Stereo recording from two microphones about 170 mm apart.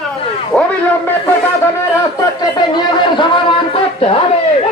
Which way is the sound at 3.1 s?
30° left (ahead or behind).